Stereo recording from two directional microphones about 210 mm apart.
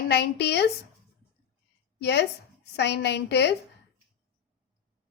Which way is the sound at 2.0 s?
55° left (ahead or behind).